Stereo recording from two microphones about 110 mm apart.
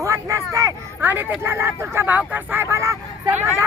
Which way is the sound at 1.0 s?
15° right (ahead or behind).